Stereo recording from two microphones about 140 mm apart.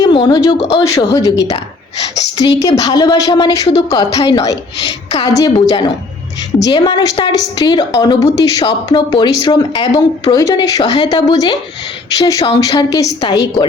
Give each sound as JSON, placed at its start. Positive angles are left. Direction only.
{"t": 0.0, "sound": "a woman's voice", "side_deg": 35}
{"t": 9.9, "sound": "a woman's voice", "side_deg": 25}